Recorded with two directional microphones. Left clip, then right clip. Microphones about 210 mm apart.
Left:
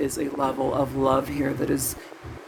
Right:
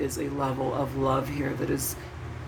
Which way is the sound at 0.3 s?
30° left (ahead or behind).